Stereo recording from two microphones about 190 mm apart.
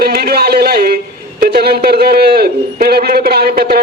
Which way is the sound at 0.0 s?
55° right (ahead or behind).